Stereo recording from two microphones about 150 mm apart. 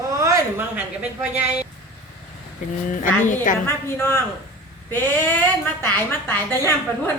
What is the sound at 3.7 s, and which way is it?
Speech, 15° left (ahead or behind).